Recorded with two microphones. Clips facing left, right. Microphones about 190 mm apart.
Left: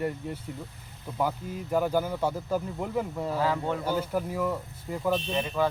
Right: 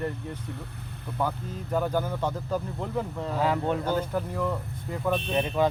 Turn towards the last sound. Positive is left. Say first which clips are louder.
# right 2 dB
turn(degrees=-20)  # may be behind; listen again after turning